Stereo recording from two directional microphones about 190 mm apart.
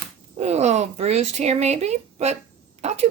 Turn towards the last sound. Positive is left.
turn(degrees=-35)  # may be behind; listen again after turning